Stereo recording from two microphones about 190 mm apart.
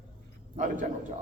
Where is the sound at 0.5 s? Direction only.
40° right (ahead or behind).